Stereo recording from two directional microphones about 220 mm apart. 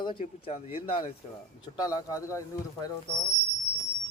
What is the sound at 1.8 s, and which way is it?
Speech, 15° left (ahead or behind).